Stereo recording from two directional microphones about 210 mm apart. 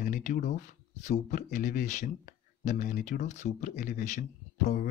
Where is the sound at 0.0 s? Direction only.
40° left (ahead or behind).